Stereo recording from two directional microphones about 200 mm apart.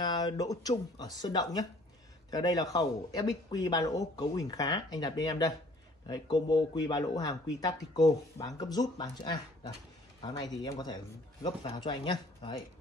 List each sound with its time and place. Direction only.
0.0 s speech: 20° left (ahead or behind)